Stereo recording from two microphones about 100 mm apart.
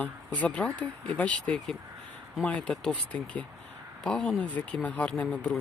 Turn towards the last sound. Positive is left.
turn(degrees=10)  # may be behind; listen again after turning